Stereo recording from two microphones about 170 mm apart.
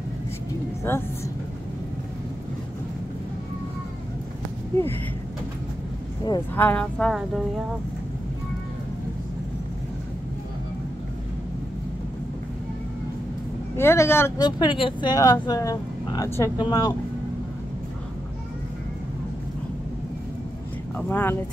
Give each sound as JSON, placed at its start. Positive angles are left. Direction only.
{"t": 0.9, "sound": "speech", "side_deg": 15}
{"t": 6.5, "sound": "speech", "side_deg": 10}
{"t": 13.7, "sound": "speech", "side_deg": 15}
{"t": 14.6, "sound": "speech", "side_deg": 30}
{"t": 21.1, "sound": "speech", "side_deg": 15}